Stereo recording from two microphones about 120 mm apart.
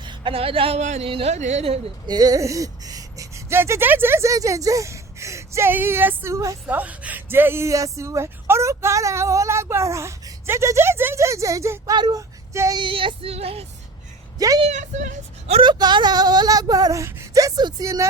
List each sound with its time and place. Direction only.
0.0 s speech: 40° right (ahead or behind)
0.8 s speech: 75° right (ahead or behind)
1.0 s female singing: 50° right (ahead or behind)
1.3 s speech: 70° right (ahead or behind)
2.0 s speech: 35° right (ahead or behind)
6.7 s speech: 15° right (ahead or behind)
11.9 s speech: 40° right (ahead or behind)
12.5 s speech: 25° right (ahead or behind)
12.8 s female singing: 45° right (ahead or behind)
14.3 s a woman's voice: 30° right (ahead or behind)
14.7 s speech: 85° right
15.6 s speech: 35° right (ahead or behind)